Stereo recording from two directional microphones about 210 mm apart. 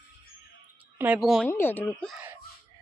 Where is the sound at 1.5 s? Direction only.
10° left (ahead or behind).